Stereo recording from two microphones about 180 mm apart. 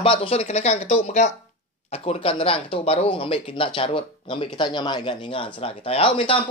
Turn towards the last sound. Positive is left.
turn(degrees=30)  # may be behind; listen again after turning